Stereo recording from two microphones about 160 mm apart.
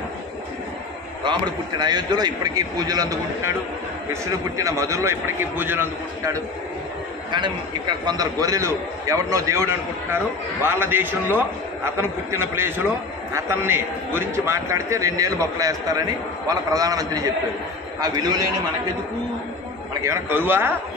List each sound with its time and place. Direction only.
1.4 s a man's voice: 25° right (ahead or behind)
7.2 s a man's voice: 30° right (ahead or behind)
20.0 s a man's voice: 15° right (ahead or behind)